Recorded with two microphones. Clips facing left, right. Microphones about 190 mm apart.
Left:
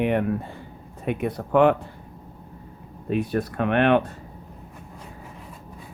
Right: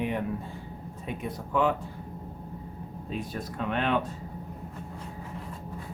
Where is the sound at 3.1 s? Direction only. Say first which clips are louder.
Left 11 dB; 65° left (ahead or behind).